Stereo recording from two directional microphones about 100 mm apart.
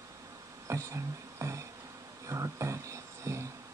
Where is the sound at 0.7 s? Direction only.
30° right (ahead or behind).